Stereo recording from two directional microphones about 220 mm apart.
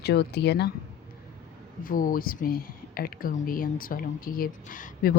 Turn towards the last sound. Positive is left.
turn(degrees=40)  # may be behind; listen again after turning